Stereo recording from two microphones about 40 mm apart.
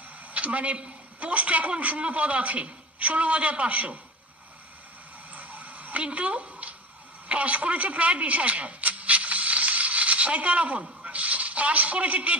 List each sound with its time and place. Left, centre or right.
0.2 s a man's voice: right
5.3 s a sound: right
11.1 s a man's voice: right